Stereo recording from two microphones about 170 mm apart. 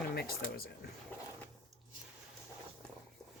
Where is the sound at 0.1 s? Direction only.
65° left (ahead or behind).